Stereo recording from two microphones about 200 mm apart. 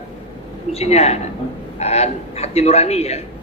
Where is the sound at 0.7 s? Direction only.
30° left (ahead or behind).